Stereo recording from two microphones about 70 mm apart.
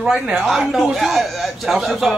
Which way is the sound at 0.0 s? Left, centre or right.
Centre.